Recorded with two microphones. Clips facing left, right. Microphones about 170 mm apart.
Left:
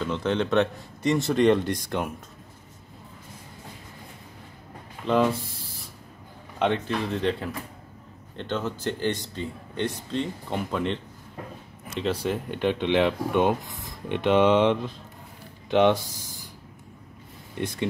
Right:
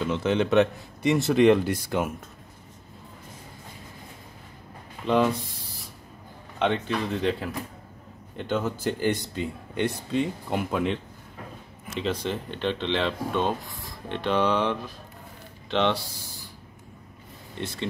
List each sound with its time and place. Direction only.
0.0 s speech: 5° right (ahead or behind)
5.0 s speech: centre (ahead or behind); by 16.3 s 20° left (ahead or behind)
17.6 s speech: 10° left (ahead or behind)